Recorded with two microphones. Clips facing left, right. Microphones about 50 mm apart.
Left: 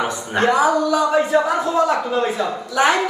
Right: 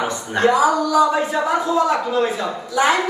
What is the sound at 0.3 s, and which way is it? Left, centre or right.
A man's voice, left.